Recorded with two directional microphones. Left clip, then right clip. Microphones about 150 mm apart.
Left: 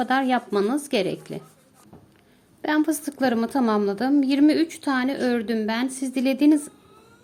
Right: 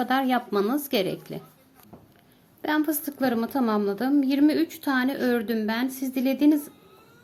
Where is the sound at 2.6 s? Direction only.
15° left (ahead or behind).